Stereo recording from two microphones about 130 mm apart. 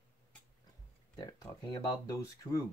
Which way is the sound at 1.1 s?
30° left (ahead or behind).